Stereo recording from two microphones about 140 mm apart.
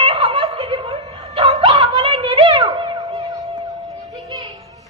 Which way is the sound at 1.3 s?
35° right (ahead or behind).